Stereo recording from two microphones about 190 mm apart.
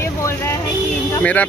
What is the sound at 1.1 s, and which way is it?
Speech, 10° left (ahead or behind).